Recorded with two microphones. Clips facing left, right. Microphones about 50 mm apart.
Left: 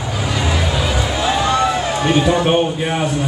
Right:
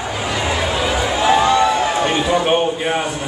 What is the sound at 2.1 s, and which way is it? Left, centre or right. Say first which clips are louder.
Speech: left 5 dB; centre.